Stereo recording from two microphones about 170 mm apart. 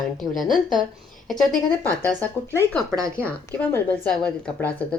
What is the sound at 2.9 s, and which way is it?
Speech, 15° right (ahead or behind).